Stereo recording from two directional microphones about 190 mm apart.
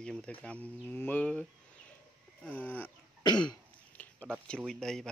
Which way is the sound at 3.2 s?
25° left (ahead or behind).